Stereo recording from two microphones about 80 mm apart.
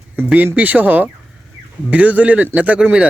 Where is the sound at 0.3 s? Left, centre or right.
Right.